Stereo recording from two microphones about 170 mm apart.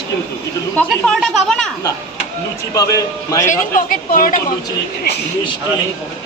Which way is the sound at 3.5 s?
55° left (ahead or behind).